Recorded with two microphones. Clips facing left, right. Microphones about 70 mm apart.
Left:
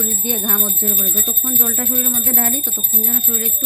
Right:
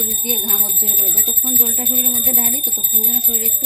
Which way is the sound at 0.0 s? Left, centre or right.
Left.